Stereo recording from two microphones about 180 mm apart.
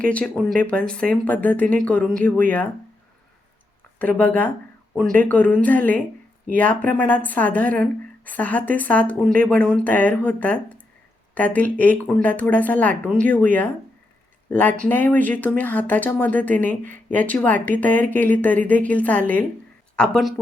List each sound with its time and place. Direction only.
0.0 s speech: 5° left (ahead or behind)
3.9 s speech: 10° left (ahead or behind)